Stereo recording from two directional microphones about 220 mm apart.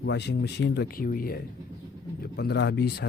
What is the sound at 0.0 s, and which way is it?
Speech, 50° left (ahead or behind).